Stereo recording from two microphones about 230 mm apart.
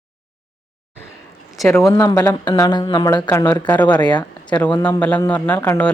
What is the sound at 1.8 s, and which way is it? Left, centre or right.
Speech, centre.